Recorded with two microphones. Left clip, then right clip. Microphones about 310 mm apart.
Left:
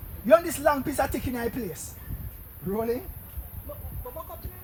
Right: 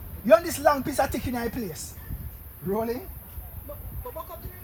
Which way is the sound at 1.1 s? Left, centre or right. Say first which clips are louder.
Right 1 dB; centre.